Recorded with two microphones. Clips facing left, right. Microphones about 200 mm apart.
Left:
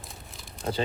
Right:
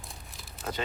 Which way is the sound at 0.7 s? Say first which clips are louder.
Left 5 dB; 30° left (ahead or behind).